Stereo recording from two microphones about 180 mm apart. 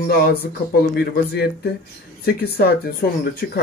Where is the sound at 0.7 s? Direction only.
60° left (ahead or behind).